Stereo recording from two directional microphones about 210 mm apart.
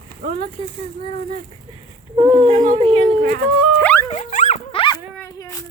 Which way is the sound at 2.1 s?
25° right (ahead or behind).